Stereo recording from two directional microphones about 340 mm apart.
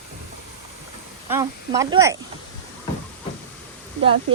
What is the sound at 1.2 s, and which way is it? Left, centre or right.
Speech, centre.